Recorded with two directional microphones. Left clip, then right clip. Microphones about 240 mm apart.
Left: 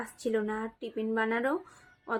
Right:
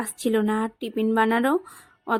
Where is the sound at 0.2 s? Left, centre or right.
Right.